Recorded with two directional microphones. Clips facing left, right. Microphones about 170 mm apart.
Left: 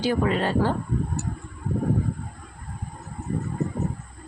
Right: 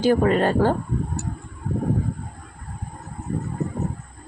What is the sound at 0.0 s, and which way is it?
Speech, 45° right (ahead or behind).